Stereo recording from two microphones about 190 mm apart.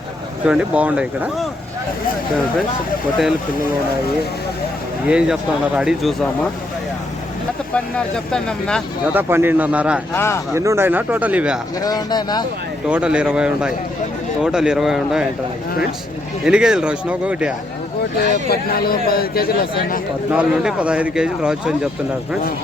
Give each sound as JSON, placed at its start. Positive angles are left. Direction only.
{"t": 0.4, "sound": "speech", "side_deg": -5}
{"t": 5.0, "sound": "speech", "side_deg": -5}
{"t": 7.7, "sound": "speech", "side_deg": 5}
{"t": 9.1, "sound": "speech", "side_deg": -10}
{"t": 10.2, "sound": "speech", "side_deg": 15}
{"t": 10.5, "sound": "speech", "side_deg": -15}
{"t": 11.8, "sound": "speech", "side_deg": 20}
{"t": 12.9, "sound": "speech", "side_deg": -5}
{"t": 16.5, "sound": "speech", "side_deg": -5}
{"t": 18.5, "sound": "a man's voice", "side_deg": 50}
{"t": 20.3, "sound": "speech", "side_deg": -5}